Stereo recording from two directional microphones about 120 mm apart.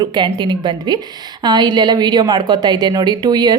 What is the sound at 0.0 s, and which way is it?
A woman's voice, 40° right (ahead or behind).